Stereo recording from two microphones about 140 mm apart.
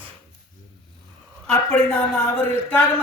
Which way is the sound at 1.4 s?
5° left (ahead or behind).